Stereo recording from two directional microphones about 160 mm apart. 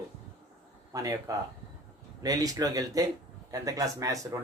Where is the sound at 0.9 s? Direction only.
20° right (ahead or behind).